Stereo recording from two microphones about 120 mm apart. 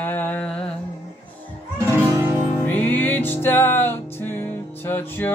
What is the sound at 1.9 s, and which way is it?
Music, 20° right (ahead or behind).